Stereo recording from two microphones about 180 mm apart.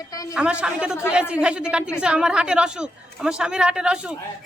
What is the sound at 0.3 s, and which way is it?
A woman's voice, 5° right (ahead or behind).